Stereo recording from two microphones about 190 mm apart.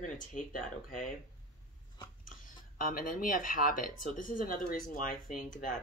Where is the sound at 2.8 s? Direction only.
50° left (ahead or behind).